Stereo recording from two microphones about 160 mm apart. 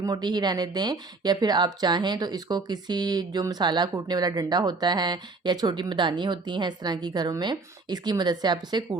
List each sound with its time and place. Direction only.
0.0 s speech: 25° right (ahead or behind)